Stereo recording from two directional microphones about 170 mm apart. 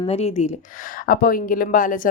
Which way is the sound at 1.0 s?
60° left (ahead or behind).